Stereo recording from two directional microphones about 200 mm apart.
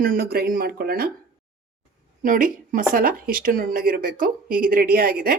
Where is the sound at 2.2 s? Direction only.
40° right (ahead or behind).